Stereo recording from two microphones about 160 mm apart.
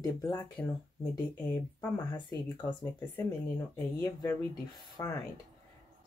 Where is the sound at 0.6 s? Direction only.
10° left (ahead or behind).